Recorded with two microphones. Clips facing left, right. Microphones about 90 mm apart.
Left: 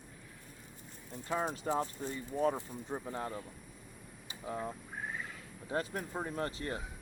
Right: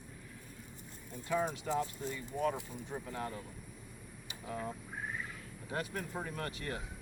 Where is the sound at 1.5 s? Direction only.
40° left (ahead or behind).